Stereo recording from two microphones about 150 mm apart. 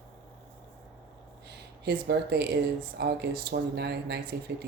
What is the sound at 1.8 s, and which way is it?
Speech, 90° right.